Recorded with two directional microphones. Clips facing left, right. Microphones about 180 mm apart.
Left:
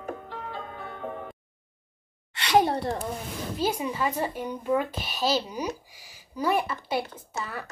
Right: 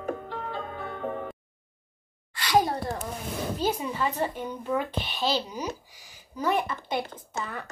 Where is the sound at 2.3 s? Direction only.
25° left (ahead or behind).